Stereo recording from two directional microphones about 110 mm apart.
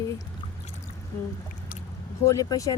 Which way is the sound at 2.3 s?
35° left (ahead or behind).